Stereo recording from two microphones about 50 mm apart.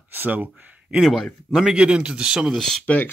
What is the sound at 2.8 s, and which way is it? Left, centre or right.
Speech, left.